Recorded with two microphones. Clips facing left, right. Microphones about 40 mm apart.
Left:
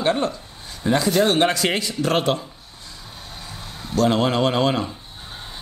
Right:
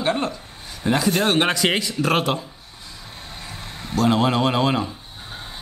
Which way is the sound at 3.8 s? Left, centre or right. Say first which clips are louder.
Left 1 dB; centre.